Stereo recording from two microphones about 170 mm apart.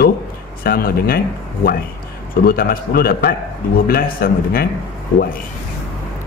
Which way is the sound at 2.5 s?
60° left (ahead or behind).